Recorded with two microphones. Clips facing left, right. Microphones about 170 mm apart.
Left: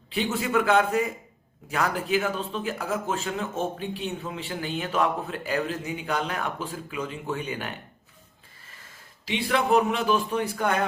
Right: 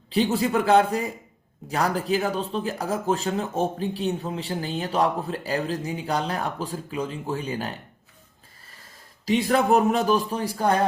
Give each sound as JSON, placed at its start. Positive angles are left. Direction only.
{"t": 0.1, "sound": "speech", "side_deg": -35}
{"t": 8.8, "sound": "a man's voice", "side_deg": -40}